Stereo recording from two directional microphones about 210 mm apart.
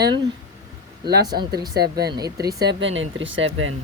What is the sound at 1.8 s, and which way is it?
Speech, 50° right (ahead or behind).